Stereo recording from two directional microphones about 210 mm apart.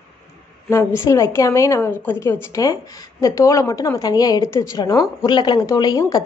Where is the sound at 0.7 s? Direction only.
15° left (ahead or behind).